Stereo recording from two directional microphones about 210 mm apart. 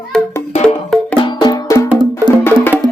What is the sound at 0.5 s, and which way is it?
Music, 30° left (ahead or behind).